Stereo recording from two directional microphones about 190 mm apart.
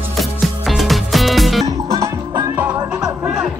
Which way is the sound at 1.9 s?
15° right (ahead or behind).